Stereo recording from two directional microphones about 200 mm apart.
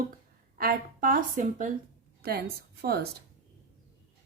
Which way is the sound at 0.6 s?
45° right (ahead or behind).